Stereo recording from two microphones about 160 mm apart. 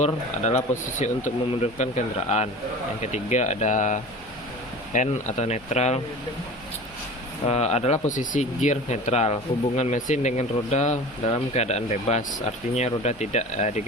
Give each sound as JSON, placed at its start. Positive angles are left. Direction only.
{"t": 0.0, "sound": "speech", "side_deg": 45}
{"t": 7.4, "sound": "speech", "side_deg": 40}